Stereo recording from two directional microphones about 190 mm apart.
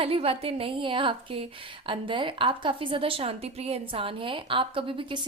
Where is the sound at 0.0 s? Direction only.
30° right (ahead or behind).